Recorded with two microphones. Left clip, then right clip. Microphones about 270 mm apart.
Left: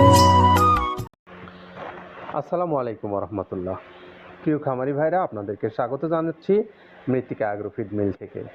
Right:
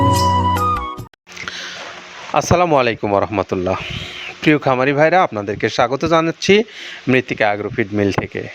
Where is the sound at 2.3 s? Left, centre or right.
Right.